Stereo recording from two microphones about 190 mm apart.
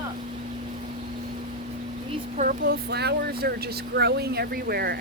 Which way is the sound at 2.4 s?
55° right (ahead or behind).